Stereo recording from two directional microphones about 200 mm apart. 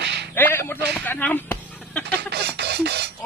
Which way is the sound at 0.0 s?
60° right (ahead or behind).